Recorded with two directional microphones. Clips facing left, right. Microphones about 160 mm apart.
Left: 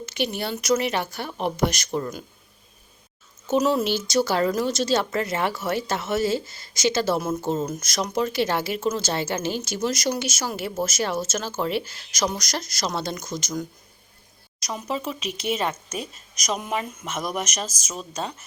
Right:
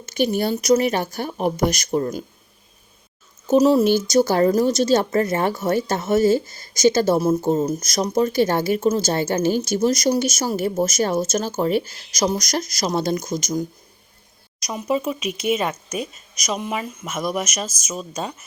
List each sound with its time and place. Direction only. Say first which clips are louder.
0.0 s a woman's voice: right 7 dB; 45° right (ahead or behind)
3.4 s a woman's voice: right 7 dB; 40° right (ahead or behind)
14.7 s speech: right 6 dB; 10° right (ahead or behind)
15.9 s speech: right 5 dB; 35° left (ahead or behind)
16.4 s speech: right 2 dB; centre (ahead or behind)